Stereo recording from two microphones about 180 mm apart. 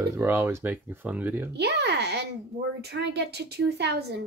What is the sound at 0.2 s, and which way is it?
Speech, 10° right (ahead or behind).